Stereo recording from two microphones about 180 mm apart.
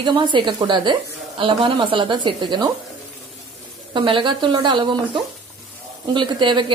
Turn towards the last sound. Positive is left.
turn(degrees=-25)  # may be behind; listen again after turning